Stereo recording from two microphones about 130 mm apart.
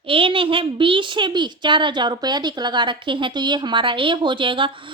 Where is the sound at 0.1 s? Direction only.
40° right (ahead or behind).